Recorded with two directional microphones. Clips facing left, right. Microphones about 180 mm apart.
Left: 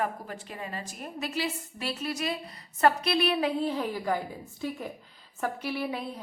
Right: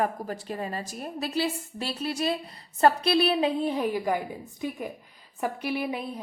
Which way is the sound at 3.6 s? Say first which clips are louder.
Right 3 dB; 15° right (ahead or behind).